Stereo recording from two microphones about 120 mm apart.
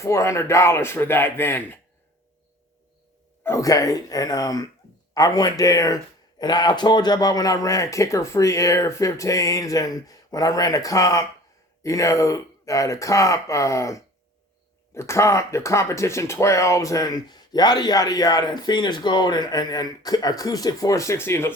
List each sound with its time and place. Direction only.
0.0 s a man's voice: 25° left (ahead or behind)
3.4 s a man's voice: 25° left (ahead or behind)